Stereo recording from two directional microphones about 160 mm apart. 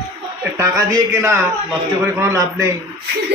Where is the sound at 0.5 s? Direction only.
20° right (ahead or behind).